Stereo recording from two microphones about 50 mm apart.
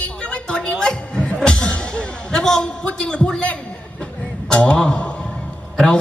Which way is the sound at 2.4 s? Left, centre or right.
Centre.